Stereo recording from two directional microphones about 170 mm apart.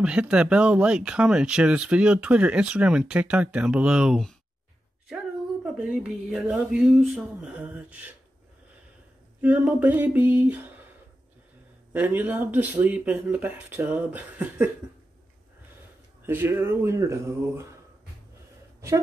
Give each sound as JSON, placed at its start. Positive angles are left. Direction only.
{"t": 0.0, "sound": "speech", "side_deg": -5}
{"t": 9.4, "sound": "speech", "side_deg": -10}
{"t": 11.9, "sound": "speech", "side_deg": -10}
{"t": 16.3, "sound": "speech", "side_deg": -10}